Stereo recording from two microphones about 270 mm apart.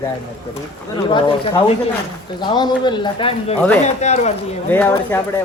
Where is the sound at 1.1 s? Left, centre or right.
Centre.